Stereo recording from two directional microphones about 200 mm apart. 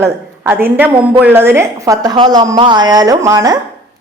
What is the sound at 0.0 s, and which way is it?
A woman's voice, 10° right (ahead or behind).